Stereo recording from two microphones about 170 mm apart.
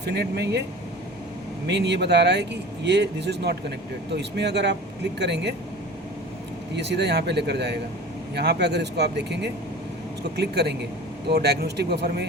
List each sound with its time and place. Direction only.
0.0 s speech: 75° right (ahead or behind)
1.6 s speech: 85° right
6.7 s speech: 90° right
10.3 s speech: 75° right (ahead or behind)